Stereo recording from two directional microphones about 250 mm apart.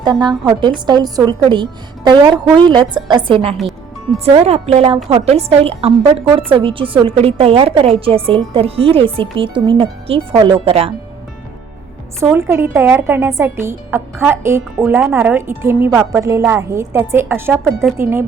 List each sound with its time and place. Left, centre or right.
0.0 s a woman's voice: centre
3.6 s music: centre
4.4 s a woman's voice: right
12.2 s a woman's voice: centre